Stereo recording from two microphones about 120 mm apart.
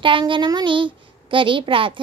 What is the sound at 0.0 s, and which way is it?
Speech, 45° right (ahead or behind).